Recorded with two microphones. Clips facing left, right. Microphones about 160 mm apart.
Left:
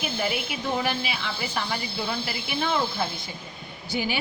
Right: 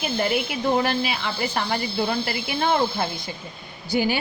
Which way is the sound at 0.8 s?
55° right (ahead or behind).